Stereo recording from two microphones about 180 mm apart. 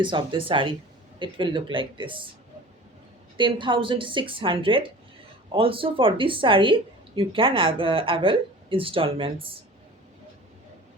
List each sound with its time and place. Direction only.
0.0 s speech: 25° right (ahead or behind)
3.3 s speech: 25° right (ahead or behind)